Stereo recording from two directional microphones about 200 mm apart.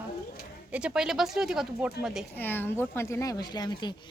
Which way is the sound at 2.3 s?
10° left (ahead or behind).